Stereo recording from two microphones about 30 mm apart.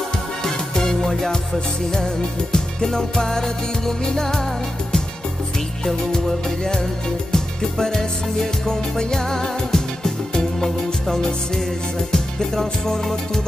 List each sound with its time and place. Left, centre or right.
0.4 s music: centre
2.5 s music: left
7.3 s music: centre